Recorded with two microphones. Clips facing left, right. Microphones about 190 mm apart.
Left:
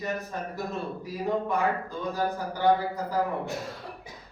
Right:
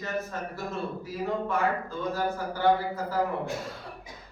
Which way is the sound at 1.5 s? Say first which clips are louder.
Left 1 dB; 15° left (ahead or behind).